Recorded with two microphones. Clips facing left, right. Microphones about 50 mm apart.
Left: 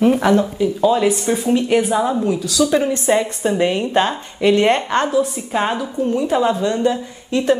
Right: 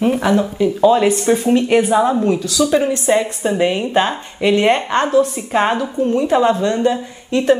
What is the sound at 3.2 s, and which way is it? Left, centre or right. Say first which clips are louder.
A woman's voice: right 1 dB; centre.